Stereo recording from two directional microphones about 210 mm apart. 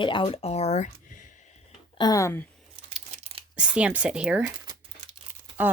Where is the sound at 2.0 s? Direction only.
15° left (ahead or behind).